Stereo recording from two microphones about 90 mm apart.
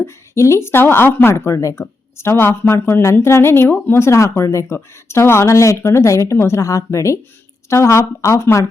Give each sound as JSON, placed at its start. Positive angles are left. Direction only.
{"t": 0.0, "sound": "a woman's voice", "side_deg": 30}